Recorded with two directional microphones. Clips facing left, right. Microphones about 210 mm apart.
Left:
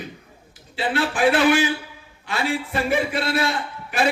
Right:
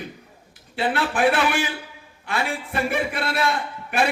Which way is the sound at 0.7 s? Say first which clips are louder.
Even; 55° right (ahead or behind).